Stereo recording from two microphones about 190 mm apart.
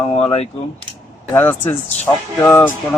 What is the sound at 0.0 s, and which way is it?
Speech, 30° left (ahead or behind).